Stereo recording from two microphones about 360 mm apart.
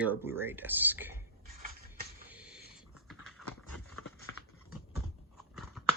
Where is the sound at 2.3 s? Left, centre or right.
Centre.